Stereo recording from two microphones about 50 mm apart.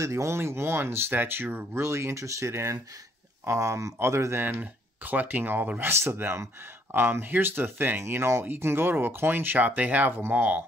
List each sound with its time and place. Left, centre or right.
0.0 s speech: right
1.8 s speech: right
3.4 s speech: right
4.5 s speech: right
8.0 s speech: right